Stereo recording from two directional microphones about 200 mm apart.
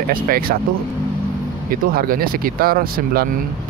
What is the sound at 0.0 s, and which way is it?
Speech, 45° right (ahead or behind).